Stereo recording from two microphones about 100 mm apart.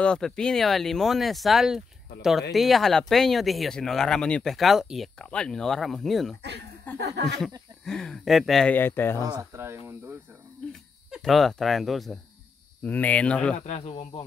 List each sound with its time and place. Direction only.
0.0 s speech: 10° left (ahead or behind)
5.2 s speech: 10° left (ahead or behind)
6.9 s speech: 20° left (ahead or behind)
7.8 s speech: 5° left (ahead or behind)
8.6 s speech: 20° left (ahead or behind)
9.2 s speech: 35° right (ahead or behind)
11.1 s speech: centre (ahead or behind)
12.8 s speech: 15° left (ahead or behind)
13.7 s speech: 85° left